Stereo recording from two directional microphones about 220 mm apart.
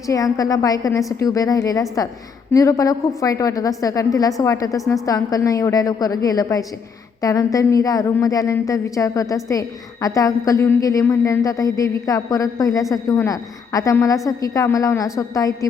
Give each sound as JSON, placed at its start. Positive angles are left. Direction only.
{"t": 0.1, "sound": "a woman's voice", "side_deg": 15}